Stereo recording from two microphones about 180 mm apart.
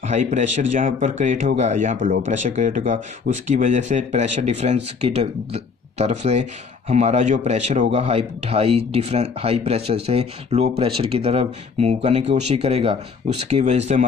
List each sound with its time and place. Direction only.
0.0 s speech: 40° right (ahead or behind)